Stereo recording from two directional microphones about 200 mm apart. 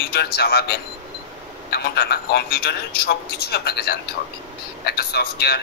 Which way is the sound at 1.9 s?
50° left (ahead or behind).